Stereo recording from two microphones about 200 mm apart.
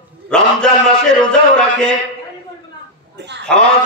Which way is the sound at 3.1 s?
60° right (ahead or behind).